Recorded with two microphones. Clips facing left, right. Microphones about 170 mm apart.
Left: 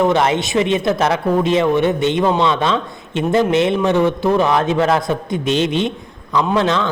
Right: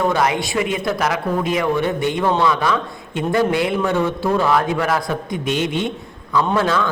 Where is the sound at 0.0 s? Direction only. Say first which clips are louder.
Left 3 dB; 25° left (ahead or behind).